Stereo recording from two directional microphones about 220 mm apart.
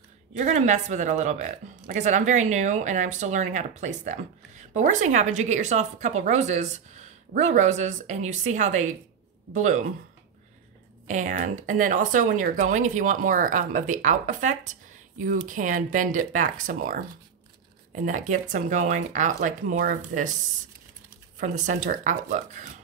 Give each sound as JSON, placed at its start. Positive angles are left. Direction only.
{"t": 0.3, "sound": "speech", "side_deg": -30}
{"t": 11.1, "sound": "speech", "side_deg": -35}
{"t": 18.0, "sound": "speech", "side_deg": -35}
{"t": 21.4, "sound": "speech", "side_deg": -35}